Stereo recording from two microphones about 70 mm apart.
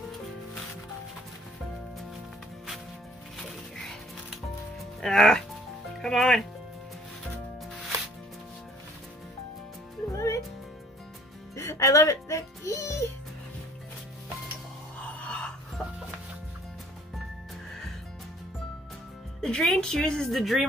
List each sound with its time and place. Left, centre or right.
5.0 s speech: centre
10.1 s music: left
11.5 s music: left
15.0 s gasp: centre
15.8 s music: centre
19.4 s music: centre